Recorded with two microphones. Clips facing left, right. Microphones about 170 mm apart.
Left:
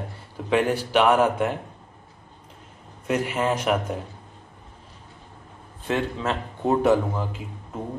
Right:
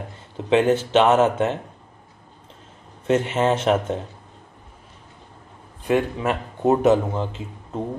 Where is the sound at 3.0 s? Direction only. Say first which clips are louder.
Right 4 dB; 25° right (ahead or behind).